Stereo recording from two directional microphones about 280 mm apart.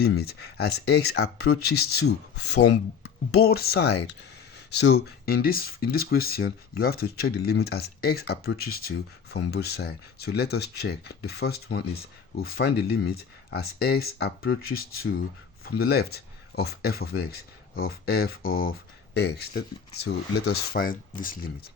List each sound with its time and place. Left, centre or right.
0.0 s speech: left
18.4 s speech: left
18.7 s speech: left